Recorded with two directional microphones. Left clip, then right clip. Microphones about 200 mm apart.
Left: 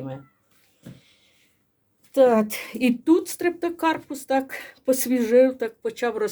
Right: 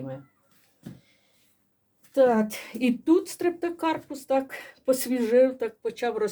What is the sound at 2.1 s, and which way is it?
A woman's voice, 30° left (ahead or behind).